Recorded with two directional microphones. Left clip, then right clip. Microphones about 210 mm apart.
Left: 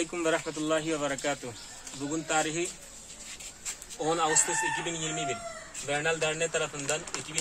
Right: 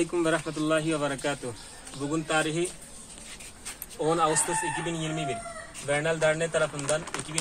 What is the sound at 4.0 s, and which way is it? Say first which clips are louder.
Speech: right 2 dB; 10° left (ahead or behind).